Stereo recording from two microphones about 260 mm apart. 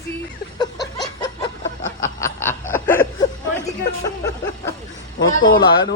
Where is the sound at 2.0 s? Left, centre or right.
Centre.